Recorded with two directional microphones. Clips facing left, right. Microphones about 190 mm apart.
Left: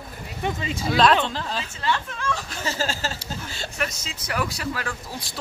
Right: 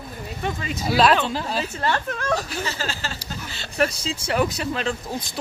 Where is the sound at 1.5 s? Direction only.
50° right (ahead or behind).